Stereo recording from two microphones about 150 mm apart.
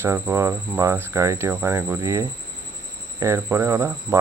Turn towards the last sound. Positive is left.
turn(degrees=-15)  # may be behind; listen again after turning